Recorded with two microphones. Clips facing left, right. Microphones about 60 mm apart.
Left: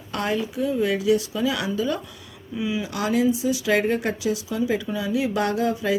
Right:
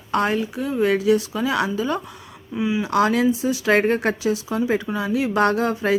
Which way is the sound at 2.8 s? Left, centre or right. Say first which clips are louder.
Right 4 dB; right.